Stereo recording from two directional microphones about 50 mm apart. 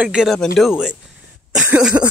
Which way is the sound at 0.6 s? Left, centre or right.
Centre.